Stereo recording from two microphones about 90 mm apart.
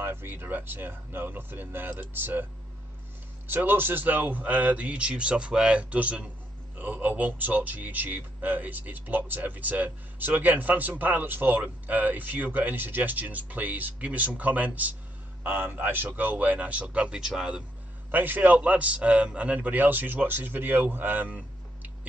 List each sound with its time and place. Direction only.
0.0 s speech: 25° right (ahead or behind)
3.4 s speech: 25° right (ahead or behind)
18.1 s speech: 20° right (ahead or behind)